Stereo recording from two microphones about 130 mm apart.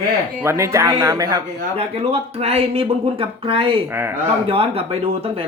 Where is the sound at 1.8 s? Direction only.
50° right (ahead or behind).